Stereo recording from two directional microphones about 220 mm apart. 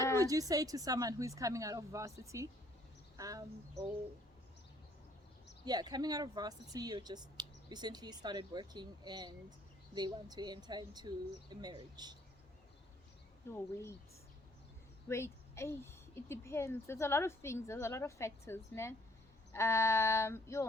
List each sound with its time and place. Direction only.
0.2 s a woman's voice: 15° right (ahead or behind)
5.6 s speech: 20° right (ahead or behind)
13.5 s a woman's voice: 10° left (ahead or behind)
15.1 s a woman's voice: 10° left (ahead or behind)